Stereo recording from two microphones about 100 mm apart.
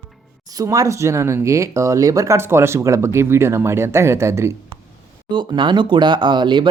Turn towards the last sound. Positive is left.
turn(degrees=-50)  # may be behind; listen again after turning